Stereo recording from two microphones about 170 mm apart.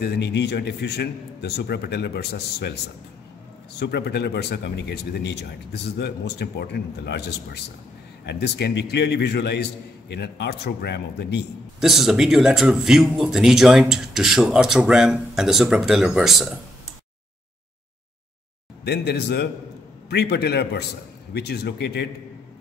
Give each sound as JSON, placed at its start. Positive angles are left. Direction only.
{"t": 0.0, "sound": "speech", "side_deg": 90}
{"t": 3.8, "sound": "a man's voice", "side_deg": 80}
{"t": 11.8, "sound": "speech", "side_deg": 0}
{"t": 18.9, "sound": "a man's voice", "side_deg": 75}